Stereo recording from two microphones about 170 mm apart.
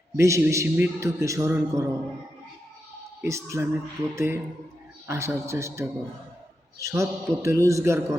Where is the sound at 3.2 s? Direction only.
15° right (ahead or behind).